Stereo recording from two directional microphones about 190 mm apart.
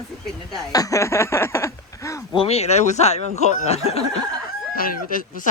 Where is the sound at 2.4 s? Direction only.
35° left (ahead or behind).